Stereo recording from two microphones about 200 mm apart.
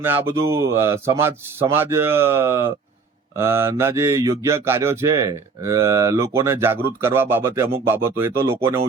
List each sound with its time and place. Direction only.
0.0 s mantra: 10° right (ahead or behind)